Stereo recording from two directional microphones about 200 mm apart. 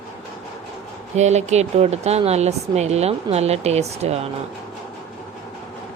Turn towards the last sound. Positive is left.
turn(degrees=-35)  # may be behind; listen again after turning